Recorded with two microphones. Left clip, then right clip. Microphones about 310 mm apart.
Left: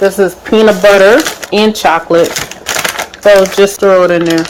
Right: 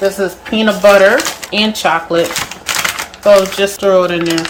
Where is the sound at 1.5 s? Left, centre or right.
Left.